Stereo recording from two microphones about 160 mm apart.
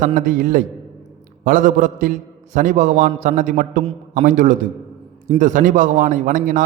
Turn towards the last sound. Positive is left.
turn(degrees=-55)  # may be behind; listen again after turning